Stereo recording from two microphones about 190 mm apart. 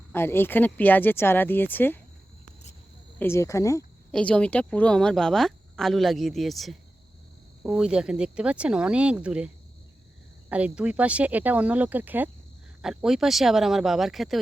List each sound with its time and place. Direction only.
0.1 s speech: 10° left (ahead or behind)
3.2 s speech: 15° left (ahead or behind)
4.1 s speech: 5° left (ahead or behind)
10.5 s speech: 5° right (ahead or behind)